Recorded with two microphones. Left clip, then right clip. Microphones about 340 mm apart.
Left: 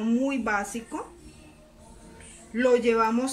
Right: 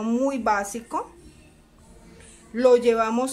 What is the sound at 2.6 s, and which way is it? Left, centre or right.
Speech, centre.